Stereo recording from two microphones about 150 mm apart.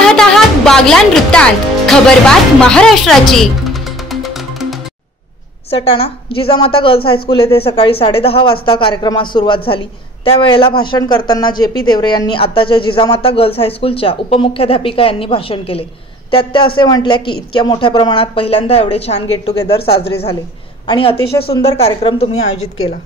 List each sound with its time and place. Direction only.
0.0 s music: 5° left (ahead or behind)
5.7 s speech: 40° left (ahead or behind)
20.8 s speech: 35° left (ahead or behind)